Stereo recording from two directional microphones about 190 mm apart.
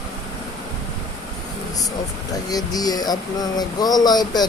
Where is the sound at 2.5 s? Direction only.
20° left (ahead or behind).